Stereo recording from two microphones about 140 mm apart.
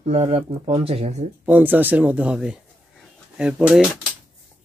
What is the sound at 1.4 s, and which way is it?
Speech, 10° right (ahead or behind).